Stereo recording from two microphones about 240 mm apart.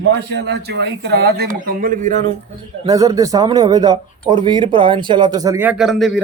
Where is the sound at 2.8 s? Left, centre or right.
Centre.